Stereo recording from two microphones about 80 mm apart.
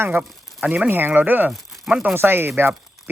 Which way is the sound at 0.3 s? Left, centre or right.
Centre.